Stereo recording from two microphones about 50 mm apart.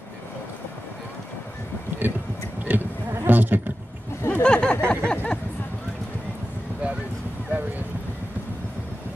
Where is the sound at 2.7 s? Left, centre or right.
Right.